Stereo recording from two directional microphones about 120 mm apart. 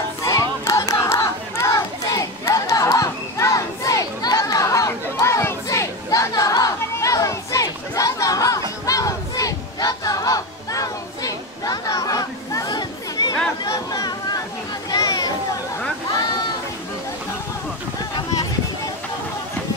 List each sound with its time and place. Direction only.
0.2 s crowd: 25° left (ahead or behind)
8.8 s battle cry: 30° left (ahead or behind)
13.7 s a sound: 35° left (ahead or behind)